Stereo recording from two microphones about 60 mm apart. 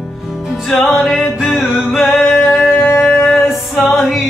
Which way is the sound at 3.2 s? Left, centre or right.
Left.